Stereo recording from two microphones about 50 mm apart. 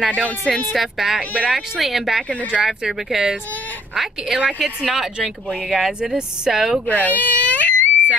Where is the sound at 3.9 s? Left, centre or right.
Centre.